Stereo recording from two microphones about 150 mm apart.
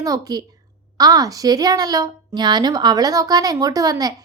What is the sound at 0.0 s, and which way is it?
A woman's voice, 25° right (ahead or behind).